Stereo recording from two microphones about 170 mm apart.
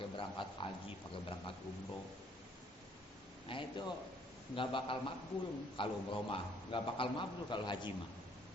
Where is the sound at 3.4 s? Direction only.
30° left (ahead or behind).